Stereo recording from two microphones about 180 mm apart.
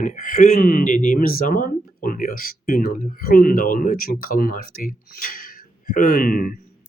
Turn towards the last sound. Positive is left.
turn(degrees=50)  # may be behind; listen again after turning